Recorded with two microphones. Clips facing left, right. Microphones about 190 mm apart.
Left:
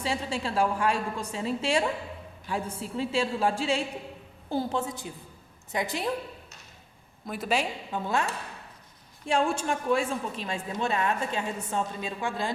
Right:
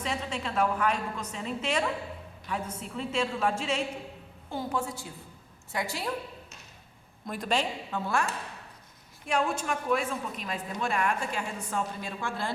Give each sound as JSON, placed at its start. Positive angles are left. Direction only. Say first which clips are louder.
{"t": 0.0, "sound": "a woman's voice", "louder": "left 3 dB", "side_deg": 30}
{"t": 7.3, "sound": "a woman's voice", "louder": "left 1 dB", "side_deg": 5}